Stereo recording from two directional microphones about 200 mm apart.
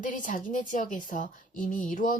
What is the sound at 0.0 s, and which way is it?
A woman's voice, 40° left (ahead or behind).